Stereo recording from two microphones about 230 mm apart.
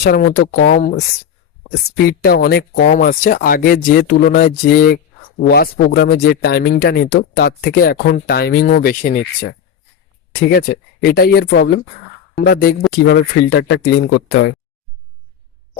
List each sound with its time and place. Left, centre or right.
0.0 s speech: left
2.0 s speech: left